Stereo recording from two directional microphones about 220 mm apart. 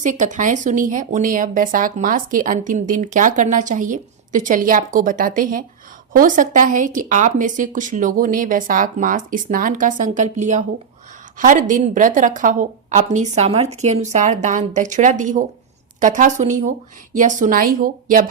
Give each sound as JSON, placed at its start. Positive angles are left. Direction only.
{"t": 0.0, "sound": "speech", "side_deg": -35}